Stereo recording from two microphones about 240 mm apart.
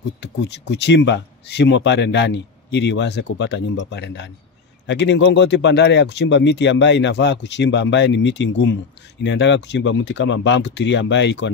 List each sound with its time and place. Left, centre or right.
0.2 s speech: left